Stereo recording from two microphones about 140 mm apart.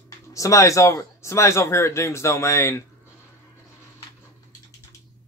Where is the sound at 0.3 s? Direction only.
25° left (ahead or behind).